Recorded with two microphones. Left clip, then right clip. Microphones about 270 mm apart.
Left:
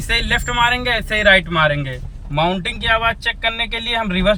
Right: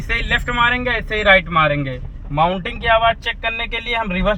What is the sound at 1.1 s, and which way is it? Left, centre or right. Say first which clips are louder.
Speech: even; centre.